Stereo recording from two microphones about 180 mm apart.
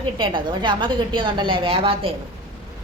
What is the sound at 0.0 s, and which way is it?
A woman's voice, 25° right (ahead or behind).